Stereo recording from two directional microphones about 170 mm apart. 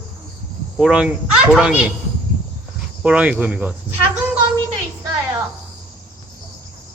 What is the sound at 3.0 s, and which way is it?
Speech, 5° right (ahead or behind).